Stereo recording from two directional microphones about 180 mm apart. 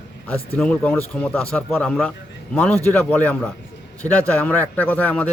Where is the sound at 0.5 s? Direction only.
5° left (ahead or behind).